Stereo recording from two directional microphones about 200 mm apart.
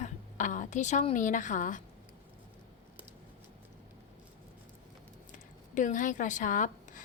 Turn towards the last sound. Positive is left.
turn(degrees=40)  # may be behind; listen again after turning